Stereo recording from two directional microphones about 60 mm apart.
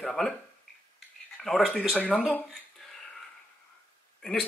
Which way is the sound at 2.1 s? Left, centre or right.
Left.